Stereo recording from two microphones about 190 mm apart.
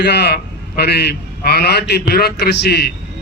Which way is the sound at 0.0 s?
60° left (ahead or behind).